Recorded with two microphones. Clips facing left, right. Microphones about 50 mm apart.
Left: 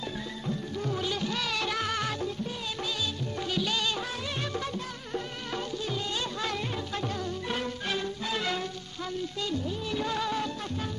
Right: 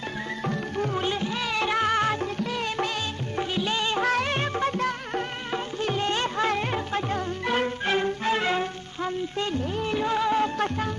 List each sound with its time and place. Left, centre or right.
0.5 s music: right
1.2 s music: right
3.3 s music: right
4.0 s music: right